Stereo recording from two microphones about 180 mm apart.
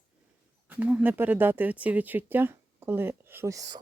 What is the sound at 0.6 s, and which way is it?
Speech, 10° right (ahead or behind).